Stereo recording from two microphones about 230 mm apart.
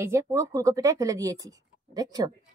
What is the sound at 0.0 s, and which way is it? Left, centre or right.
Speech, centre.